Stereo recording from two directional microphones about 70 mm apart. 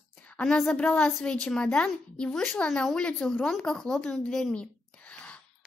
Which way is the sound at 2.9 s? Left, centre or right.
Centre.